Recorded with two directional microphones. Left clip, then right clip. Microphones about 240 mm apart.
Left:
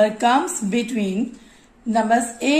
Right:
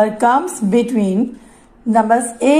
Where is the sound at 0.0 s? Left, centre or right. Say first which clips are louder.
Right 3 dB; centre.